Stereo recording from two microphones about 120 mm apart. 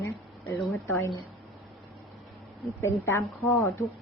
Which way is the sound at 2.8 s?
20° left (ahead or behind).